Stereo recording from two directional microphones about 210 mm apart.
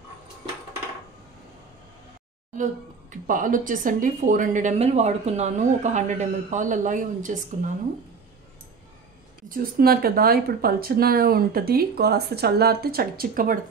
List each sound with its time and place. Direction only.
2.5 s speech: 40° right (ahead or behind)
9.5 s speech: 45° right (ahead or behind)